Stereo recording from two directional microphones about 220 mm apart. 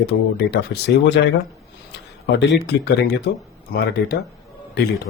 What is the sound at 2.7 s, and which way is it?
Speech, 50° left (ahead or behind).